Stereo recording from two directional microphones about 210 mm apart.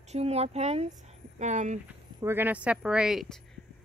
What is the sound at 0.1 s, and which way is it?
Speech, 30° right (ahead or behind).